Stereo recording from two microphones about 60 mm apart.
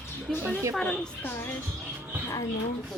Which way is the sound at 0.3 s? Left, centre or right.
Centre.